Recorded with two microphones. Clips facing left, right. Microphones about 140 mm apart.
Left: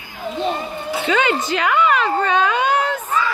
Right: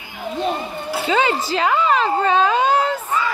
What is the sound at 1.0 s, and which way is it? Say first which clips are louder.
A woman's voice: even; 30° right (ahead or behind).